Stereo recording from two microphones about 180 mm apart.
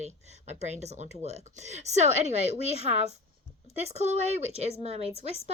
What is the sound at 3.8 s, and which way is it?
A woman's voice, 35° right (ahead or behind).